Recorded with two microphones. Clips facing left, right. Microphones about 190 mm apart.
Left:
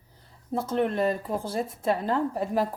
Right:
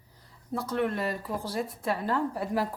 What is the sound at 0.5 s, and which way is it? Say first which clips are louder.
Speech: left 3 dB; 25° left (ahead or behind).